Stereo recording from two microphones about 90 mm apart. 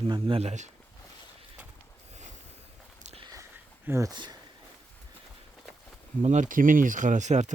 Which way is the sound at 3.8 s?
30° right (ahead or behind).